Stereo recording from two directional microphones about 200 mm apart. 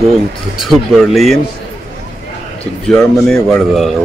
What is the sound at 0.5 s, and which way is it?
Speech, centre (ahead or behind).